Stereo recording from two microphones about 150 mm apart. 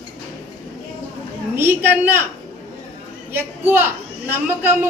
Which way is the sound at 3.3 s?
15° right (ahead or behind).